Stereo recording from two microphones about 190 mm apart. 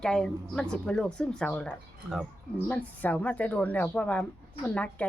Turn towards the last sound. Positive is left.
turn(degrees=10)  # may be behind; listen again after turning